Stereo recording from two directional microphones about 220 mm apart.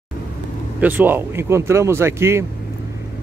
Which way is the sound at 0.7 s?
10° right (ahead or behind).